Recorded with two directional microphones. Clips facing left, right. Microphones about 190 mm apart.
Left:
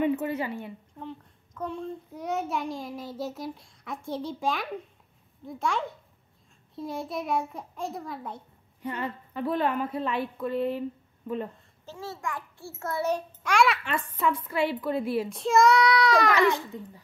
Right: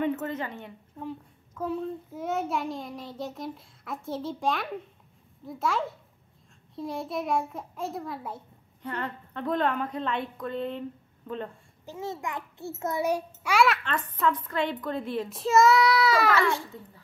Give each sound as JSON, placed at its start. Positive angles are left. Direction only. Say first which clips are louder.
{"t": 0.0, "sound": "a woman's voice", "louder": "left 2 dB", "side_deg": 10}
{"t": 1.0, "sound": "a child's voice", "louder": "right 3 dB", "side_deg": -5}
{"t": 8.8, "sound": "a woman's voice", "louder": "left 1 dB", "side_deg": 10}
{"t": 11.8, "sound": "a child's voice", "louder": "right 2 dB", "side_deg": -15}
{"t": 13.8, "sound": "a woman's voice", "louder": "even", "side_deg": 10}
{"t": 16.3, "sound": "a woman's voice", "louder": "left 2 dB", "side_deg": 15}